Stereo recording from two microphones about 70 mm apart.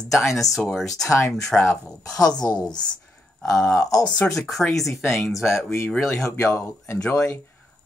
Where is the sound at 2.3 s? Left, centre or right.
Left.